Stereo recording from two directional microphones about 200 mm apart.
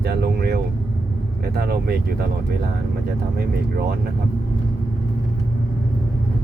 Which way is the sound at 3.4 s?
50° right (ahead or behind).